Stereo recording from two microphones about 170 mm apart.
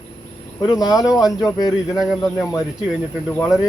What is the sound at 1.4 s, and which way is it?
Speech, 20° left (ahead or behind).